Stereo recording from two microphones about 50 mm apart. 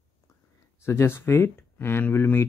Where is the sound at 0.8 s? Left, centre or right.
Left.